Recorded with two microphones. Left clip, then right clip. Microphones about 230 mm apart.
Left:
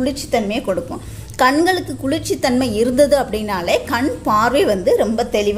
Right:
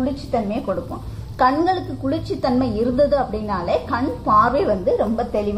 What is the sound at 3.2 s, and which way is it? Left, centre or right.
A woman's voice, left.